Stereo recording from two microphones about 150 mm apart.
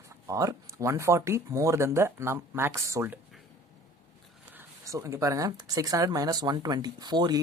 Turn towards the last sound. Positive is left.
turn(degrees=-30)  # may be behind; listen again after turning